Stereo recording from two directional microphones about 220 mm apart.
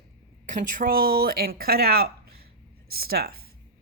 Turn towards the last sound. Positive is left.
turn(degrees=-45)  # may be behind; listen again after turning